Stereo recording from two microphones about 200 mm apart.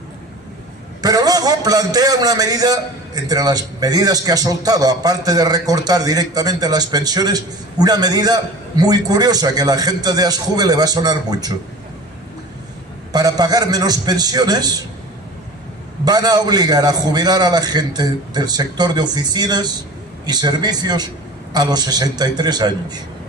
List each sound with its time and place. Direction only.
1.0 s a man's voice: 20° right (ahead or behind)
13.1 s a man's voice: 20° right (ahead or behind)
16.0 s a man's voice: 20° right (ahead or behind)